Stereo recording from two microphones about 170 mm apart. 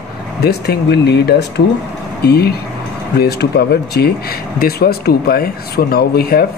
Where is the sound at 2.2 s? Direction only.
65° left (ahead or behind).